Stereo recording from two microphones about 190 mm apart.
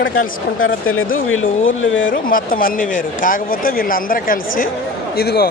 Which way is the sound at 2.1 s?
45° left (ahead or behind).